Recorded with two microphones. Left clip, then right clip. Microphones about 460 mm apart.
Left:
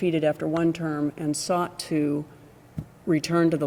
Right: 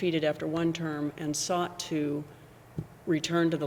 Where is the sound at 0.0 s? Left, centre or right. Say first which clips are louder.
Left 5 dB; left.